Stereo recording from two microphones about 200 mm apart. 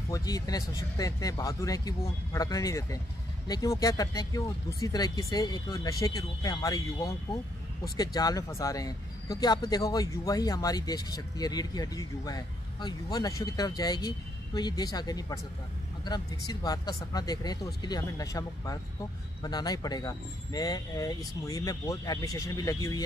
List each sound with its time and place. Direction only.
0.1 s speech: 20° left (ahead or behind)